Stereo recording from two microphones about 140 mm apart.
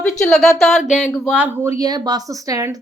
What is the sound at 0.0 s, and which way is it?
Speech, 5° left (ahead or behind).